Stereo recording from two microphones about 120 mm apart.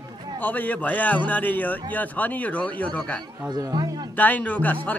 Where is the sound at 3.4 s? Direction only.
35° right (ahead or behind).